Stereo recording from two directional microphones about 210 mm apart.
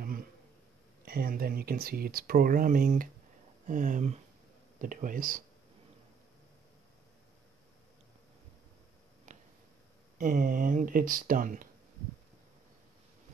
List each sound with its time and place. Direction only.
1.0 s speech: 45° right (ahead or behind)
9.3 s a sound: 35° right (ahead or behind)
10.1 s speech: 40° right (ahead or behind)